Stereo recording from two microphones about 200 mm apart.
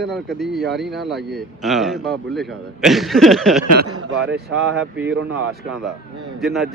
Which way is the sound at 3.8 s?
85° right.